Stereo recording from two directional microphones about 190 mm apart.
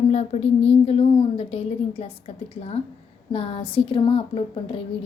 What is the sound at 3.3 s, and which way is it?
Speech, 30° left (ahead or behind).